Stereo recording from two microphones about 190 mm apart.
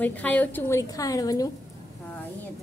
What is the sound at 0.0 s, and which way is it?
A woman's voice, 10° left (ahead or behind).